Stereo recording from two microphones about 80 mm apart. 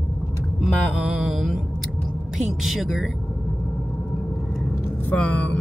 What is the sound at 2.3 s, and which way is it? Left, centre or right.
Speech, centre.